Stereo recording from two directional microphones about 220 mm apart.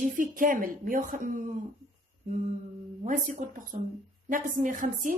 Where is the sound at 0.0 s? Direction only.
35° right (ahead or behind).